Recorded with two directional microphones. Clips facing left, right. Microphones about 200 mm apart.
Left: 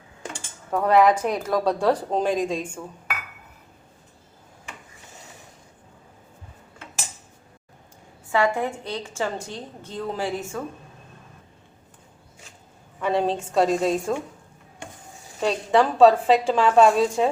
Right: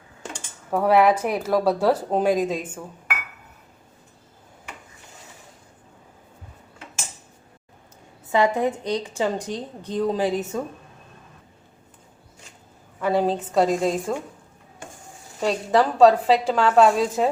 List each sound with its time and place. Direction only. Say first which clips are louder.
0.7 s a woman's voice: even; 5° right (ahead or behind)
8.3 s a woman's voice: right 2 dB; 20° right (ahead or behind)
13.0 s a woman's voice: right 2 dB; 5° right (ahead or behind)
15.4 s a woman's voice: even; centre (ahead or behind)